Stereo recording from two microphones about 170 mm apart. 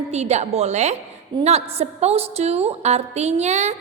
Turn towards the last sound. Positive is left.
turn(degrees=-40)  # may be behind; listen again after turning